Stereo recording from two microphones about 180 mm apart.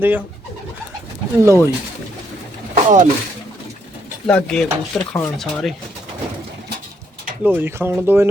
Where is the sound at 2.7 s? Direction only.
45° right (ahead or behind).